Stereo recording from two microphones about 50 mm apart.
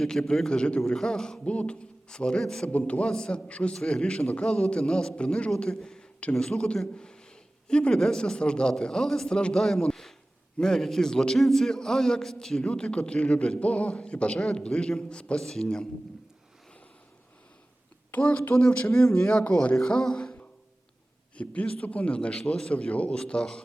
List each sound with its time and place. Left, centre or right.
0.0 s a man's voice: centre
2.7 s a man's voice: left
3.1 s a man's voice: centre
5.7 s a sound: centre
6.3 s a man's voice: centre
9.9 s a sound: centre
10.6 s a man's voice: centre
12.6 s a man's voice: left
18.1 s a man's voice: left
19.7 s a man's voice: centre
21.3 s a man's voice: left